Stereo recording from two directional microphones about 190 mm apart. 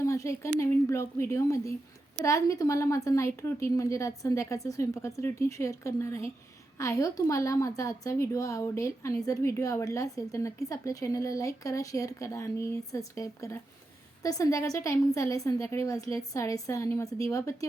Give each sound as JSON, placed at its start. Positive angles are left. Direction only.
{"t": 0.0, "sound": "a woman's voice", "side_deg": 15}